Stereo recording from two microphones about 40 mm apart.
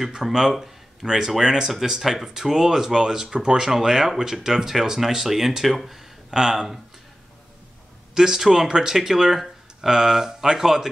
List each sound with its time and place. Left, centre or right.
0.0 s speech: centre
8.1 s speech: centre